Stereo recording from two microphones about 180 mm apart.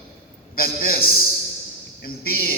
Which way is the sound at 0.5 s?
55° left (ahead or behind).